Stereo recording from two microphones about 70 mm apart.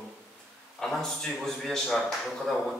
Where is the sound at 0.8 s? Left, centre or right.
Centre.